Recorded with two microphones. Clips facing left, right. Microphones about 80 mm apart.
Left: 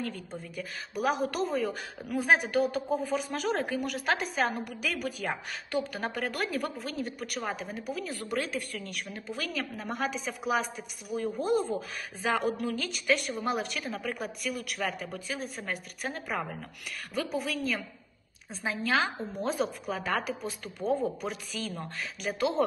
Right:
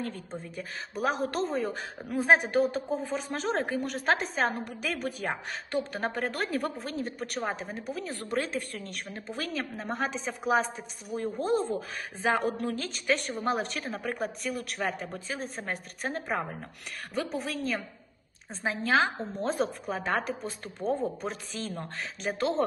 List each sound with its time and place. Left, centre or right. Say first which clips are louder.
0.0 s a woman's voice: right 1 dB; right
11.3 s speech: right 1 dB; centre
12.2 s a woman's voice: right 1 dB; right
18.6 s a woman's voice: right 3 dB; right
20.8 s speech: left 1 dB; centre
21.2 s a woman's voice: even; right